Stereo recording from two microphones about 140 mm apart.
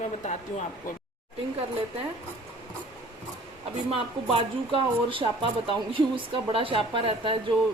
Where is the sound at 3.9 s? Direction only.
40° right (ahead or behind).